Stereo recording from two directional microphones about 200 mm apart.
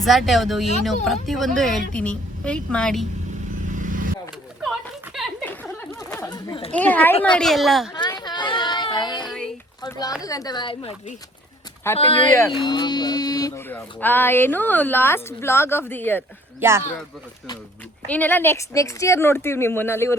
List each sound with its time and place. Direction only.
0.0 s a woman's voice: centre (ahead or behind)
3.7 s vehicle: 40° right (ahead or behind)
4.6 s a sound: centre (ahead or behind)
5.5 s a sound: 10° left (ahead or behind)
6.7 s a woman's voice: 10° left (ahead or behind)
7.9 s a sound: 20° left (ahead or behind)
9.8 s speech: 20° left (ahead or behind)
11.9 s speech: 25° left (ahead or behind); by 16.2 s 10° left (ahead or behind)
16.6 s speech: 10° right (ahead or behind)
18.1 s speech: 10° left (ahead or behind)